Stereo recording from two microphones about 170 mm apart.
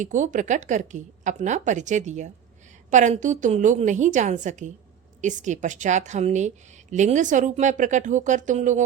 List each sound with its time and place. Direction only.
0.0 s a woman's voice: 50° right (ahead or behind)